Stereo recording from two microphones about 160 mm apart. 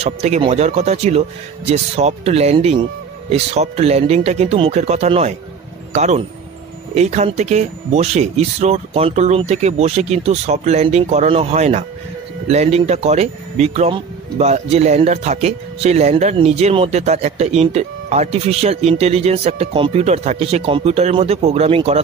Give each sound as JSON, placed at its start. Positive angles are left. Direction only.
{"t": 0.0, "sound": "a man's voice", "side_deg": -45}